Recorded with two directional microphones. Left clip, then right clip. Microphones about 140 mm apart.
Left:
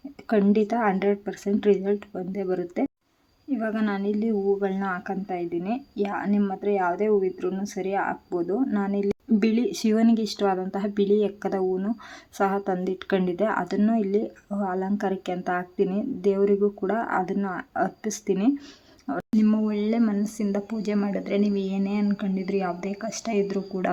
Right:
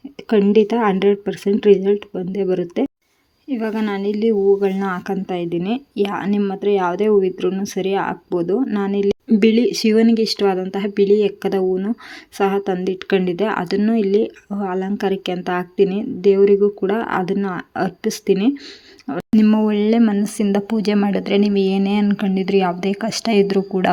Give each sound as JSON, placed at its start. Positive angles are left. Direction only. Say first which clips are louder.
{"t": 0.3, "sound": "a woman's voice", "louder": "right 8 dB", "side_deg": -15}
{"t": 19.4, "sound": "speech", "louder": "right 9 dB", "side_deg": -40}